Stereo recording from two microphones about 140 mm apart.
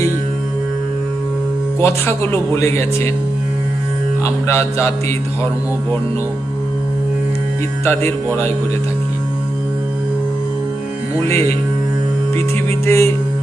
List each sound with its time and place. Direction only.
1.8 s speech: 20° left (ahead or behind)
4.2 s speech: 20° left (ahead or behind)
7.9 s speech: 15° left (ahead or behind)
12.8 s speech: 20° left (ahead or behind)